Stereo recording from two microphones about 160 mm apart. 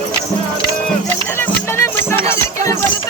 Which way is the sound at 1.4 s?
15° left (ahead or behind).